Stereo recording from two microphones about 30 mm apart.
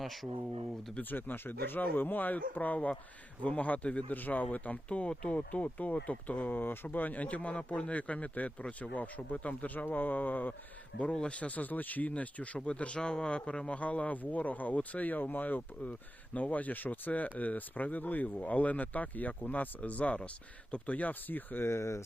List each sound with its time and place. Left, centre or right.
0.0 s speech: centre
1.1 s a man's voice: left
4.1 s speech: left
6.9 s speech: left
11.1 s speech: left
11.3 s speech: left
12.6 s speech: left
13.0 s speech: left
13.7 s speech: left
15.8 s speech: left
18.3 s speech: left